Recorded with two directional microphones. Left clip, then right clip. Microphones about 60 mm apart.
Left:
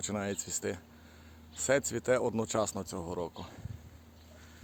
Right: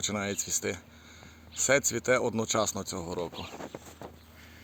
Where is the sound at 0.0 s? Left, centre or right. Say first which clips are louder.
Right 4 dB; right.